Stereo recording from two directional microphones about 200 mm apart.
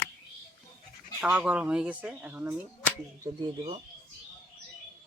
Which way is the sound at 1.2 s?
5° right (ahead or behind).